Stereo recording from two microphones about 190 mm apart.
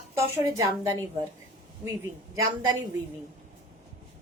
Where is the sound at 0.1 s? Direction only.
15° right (ahead or behind).